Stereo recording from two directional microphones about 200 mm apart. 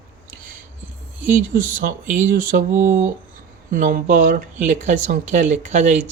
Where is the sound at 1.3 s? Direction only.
40° right (ahead or behind).